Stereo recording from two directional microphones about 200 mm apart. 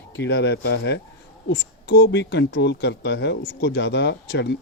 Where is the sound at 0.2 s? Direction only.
60° left (ahead or behind).